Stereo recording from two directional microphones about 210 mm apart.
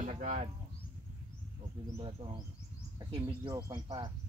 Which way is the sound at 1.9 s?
25° right (ahead or behind).